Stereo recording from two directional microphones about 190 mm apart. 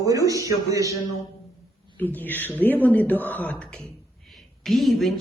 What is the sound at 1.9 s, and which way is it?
A man's voice, 10° left (ahead or behind).